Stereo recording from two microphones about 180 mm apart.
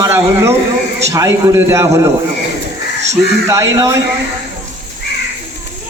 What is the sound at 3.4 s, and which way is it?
Speech, 15° right (ahead or behind).